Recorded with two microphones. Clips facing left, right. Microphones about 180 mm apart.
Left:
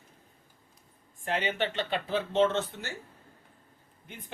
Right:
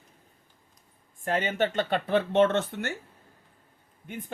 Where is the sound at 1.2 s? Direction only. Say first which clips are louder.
Right 4 dB; 45° right (ahead or behind); by 2.9 s 65° right (ahead or behind).